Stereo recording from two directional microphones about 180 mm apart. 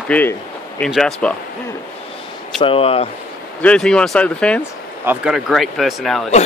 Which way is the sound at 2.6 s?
30° left (ahead or behind).